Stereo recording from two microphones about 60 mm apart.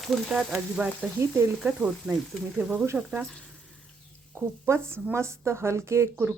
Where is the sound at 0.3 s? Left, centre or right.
Centre.